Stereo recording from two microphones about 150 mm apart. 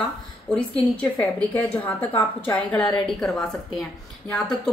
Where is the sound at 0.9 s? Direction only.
10° left (ahead or behind).